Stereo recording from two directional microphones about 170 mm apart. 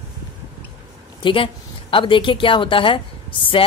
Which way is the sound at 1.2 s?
30° left (ahead or behind).